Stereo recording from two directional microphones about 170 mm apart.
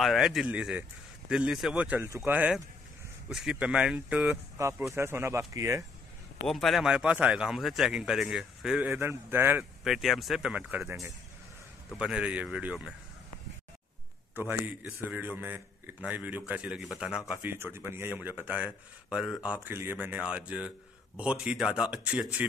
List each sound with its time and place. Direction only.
0.0 s a man's voice: centre (ahead or behind); by 5.9 s 15° right (ahead or behind)
6.4 s speech: centre (ahead or behind); by 11.1 s 15° right (ahead or behind)
11.9 s speech: 5° right (ahead or behind)
14.3 s a man's voice: 10° right (ahead or behind)